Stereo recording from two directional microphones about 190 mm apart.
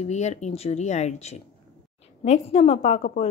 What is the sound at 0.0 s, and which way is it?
A woman's voice, 35° left (ahead or behind).